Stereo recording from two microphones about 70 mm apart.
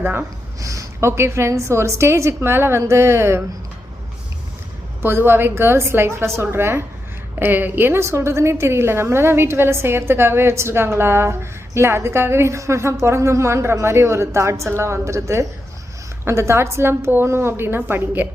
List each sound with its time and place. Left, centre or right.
0.0 s a woman's voice: right
0.6 s a woman's voice: right
5.0 s a woman's voice: right